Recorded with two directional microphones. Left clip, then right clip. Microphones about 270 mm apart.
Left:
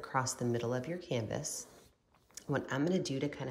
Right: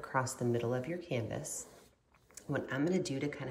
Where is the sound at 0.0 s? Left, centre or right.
Centre.